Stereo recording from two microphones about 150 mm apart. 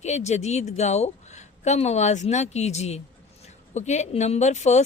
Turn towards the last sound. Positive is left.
turn(degrees=50)  # may be behind; listen again after turning